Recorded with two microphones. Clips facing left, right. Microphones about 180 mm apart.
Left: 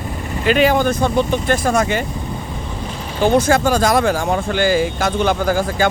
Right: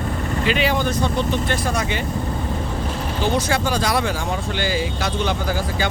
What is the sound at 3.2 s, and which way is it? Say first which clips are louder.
Speech: left 8 dB; 50° left (ahead or behind).